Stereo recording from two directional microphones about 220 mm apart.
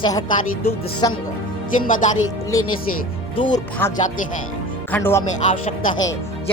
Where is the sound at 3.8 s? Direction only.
10° left (ahead or behind).